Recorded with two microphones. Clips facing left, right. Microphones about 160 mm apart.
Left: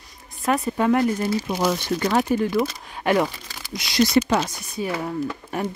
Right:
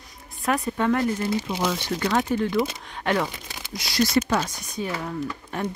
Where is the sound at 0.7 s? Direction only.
10° left (ahead or behind).